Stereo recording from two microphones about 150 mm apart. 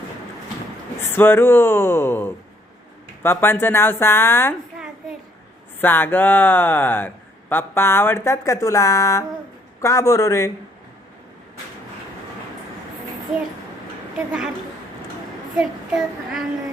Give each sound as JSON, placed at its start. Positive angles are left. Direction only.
{"t": 1.1, "sound": "speech", "side_deg": 15}
{"t": 5.8, "sound": "speech", "side_deg": 15}
{"t": 15.5, "sound": "child singing", "side_deg": 0}